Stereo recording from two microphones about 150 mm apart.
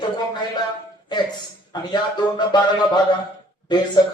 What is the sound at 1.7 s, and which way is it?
Speech, 30° left (ahead or behind).